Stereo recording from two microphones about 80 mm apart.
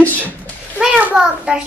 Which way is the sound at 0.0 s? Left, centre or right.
Left.